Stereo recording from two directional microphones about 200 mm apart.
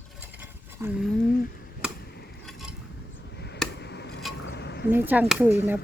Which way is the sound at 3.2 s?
60° left (ahead or behind).